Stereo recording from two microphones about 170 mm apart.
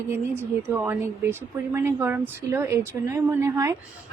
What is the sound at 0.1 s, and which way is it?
A woman's voice, 10° right (ahead or behind).